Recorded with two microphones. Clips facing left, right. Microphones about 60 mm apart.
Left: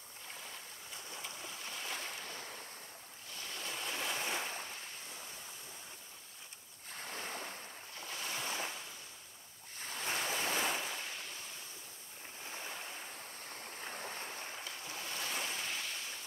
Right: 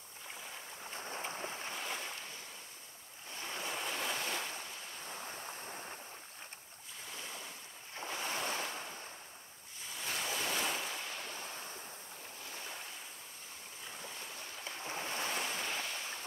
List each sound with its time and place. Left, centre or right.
0.9 s boat: right
1.8 s waves: centre
3.3 s waves: right
3.9 s waves: centre
4.2 s waves: centre
5.1 s waves: right
7.1 s waves: left
8.0 s waves: right
10.0 s waves: centre
13.7 s stream: left
14.6 s boat: right
15.4 s waves: right